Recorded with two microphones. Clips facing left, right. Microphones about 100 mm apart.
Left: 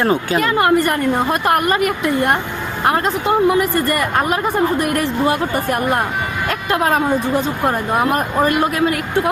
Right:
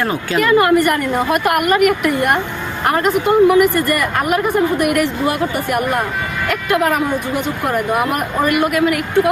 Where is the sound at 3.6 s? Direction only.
30° left (ahead or behind).